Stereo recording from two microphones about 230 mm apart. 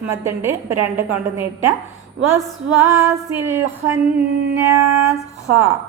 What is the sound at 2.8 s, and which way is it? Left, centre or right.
A woman's voice, centre.